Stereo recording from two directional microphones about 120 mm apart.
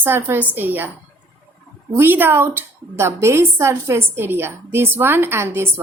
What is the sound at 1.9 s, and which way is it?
A woman's voice, 20° right (ahead or behind).